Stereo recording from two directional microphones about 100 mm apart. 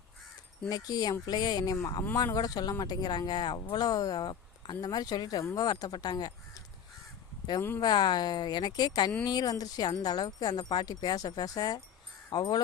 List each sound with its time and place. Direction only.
0.7 s speech: 40° left (ahead or behind)
7.8 s speech: 50° left (ahead or behind)